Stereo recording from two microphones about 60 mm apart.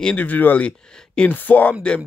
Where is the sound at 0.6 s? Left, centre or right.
Centre.